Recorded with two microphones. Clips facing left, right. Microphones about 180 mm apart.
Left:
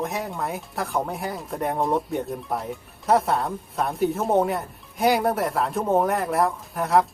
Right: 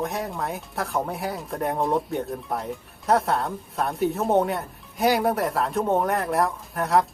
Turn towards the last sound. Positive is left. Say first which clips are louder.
# left 1 dB
turn(degrees=0)  # may be behind; listen again after turning